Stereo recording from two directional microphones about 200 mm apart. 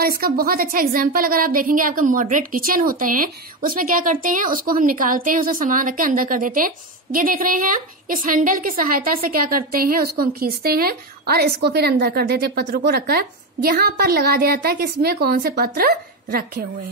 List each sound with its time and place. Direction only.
0.0 s a woman's voice: 50° right (ahead or behind)